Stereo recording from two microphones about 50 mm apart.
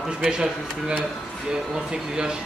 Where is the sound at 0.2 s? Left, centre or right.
Centre.